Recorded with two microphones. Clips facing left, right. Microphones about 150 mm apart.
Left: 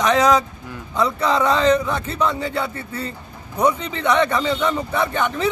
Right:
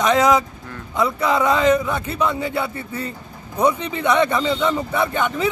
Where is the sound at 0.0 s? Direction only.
15° right (ahead or behind).